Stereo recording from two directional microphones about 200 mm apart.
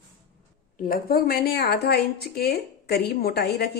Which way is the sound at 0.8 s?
45° left (ahead or behind).